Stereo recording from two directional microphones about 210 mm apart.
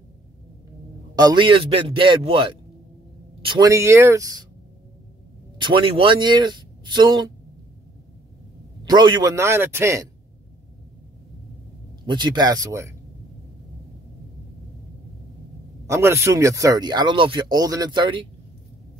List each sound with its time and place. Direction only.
1.1 s speech: 20° right (ahead or behind)
5.6 s a man's voice: 25° right (ahead or behind)
8.8 s speech: 20° right (ahead or behind)
12.1 s speech: 20° right (ahead or behind)
15.9 s speech: 10° right (ahead or behind)